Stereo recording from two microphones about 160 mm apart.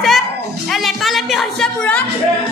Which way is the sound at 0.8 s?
Centre (ahead or behind).